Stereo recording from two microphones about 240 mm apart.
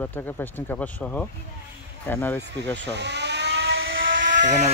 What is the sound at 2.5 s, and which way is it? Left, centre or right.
Vehicle, right.